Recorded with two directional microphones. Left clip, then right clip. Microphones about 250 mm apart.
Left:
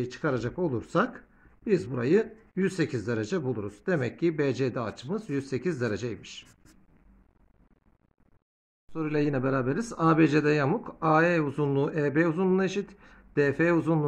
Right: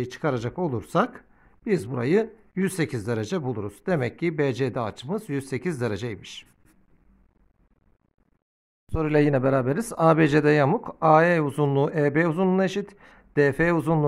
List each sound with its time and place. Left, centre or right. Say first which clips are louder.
0.0 s speech: right 3 dB; right
8.8 s speech: right 7 dB; right